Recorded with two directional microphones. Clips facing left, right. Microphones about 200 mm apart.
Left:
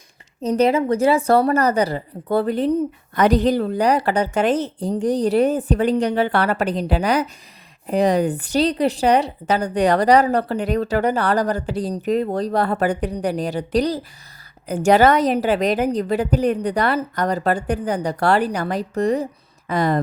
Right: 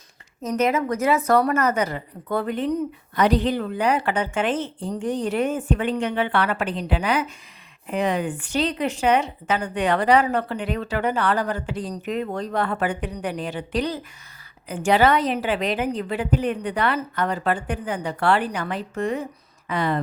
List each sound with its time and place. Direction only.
0.4 s a woman's voice: 30° left (ahead or behind)
3.2 s a woman's voice: 45° left (ahead or behind)